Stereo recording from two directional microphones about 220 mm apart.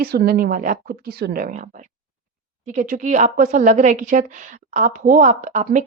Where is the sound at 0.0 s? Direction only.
45° right (ahead or behind).